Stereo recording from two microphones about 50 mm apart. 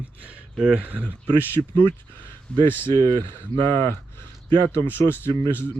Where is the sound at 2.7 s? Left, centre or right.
Left.